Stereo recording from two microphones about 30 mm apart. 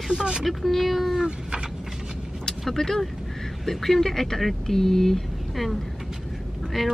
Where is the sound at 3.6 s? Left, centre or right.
Centre.